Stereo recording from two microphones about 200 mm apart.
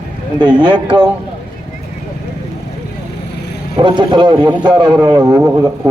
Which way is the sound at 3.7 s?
25° right (ahead or behind).